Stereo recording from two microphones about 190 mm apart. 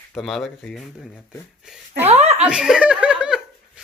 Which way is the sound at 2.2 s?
35° right (ahead or behind).